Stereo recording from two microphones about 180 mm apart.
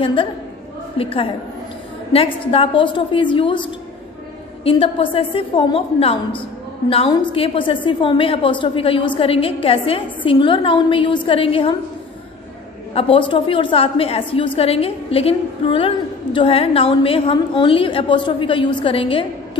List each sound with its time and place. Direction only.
0.0 s a woman's voice: 30° left (ahead or behind)
4.6 s a woman's voice: 30° left (ahead or behind)
13.0 s a woman's voice: 35° left (ahead or behind)